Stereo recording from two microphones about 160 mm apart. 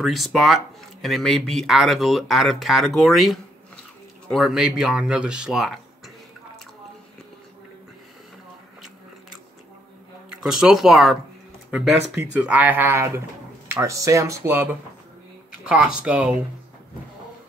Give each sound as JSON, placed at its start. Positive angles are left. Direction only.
{"t": 0.0, "sound": "speech", "side_deg": 0}
{"t": 10.3, "sound": "speech", "side_deg": -5}
{"t": 12.2, "sound": "speech", "side_deg": -10}